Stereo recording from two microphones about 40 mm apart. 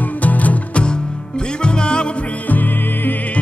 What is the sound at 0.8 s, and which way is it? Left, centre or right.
Music, left.